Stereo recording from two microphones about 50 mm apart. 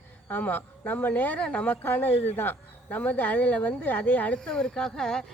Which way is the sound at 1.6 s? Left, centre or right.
Left.